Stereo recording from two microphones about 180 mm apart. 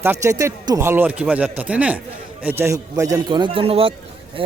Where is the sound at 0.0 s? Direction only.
15° right (ahead or behind).